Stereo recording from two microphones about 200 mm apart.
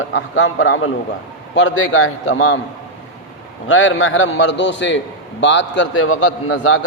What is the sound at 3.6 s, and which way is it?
A man's voice, 70° left (ahead or behind).